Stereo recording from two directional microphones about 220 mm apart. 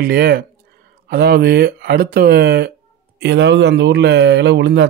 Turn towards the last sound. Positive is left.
turn(degrees=-50)  # may be behind; listen again after turning